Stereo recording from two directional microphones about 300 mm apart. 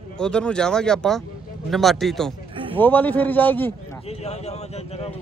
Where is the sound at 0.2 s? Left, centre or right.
Centre.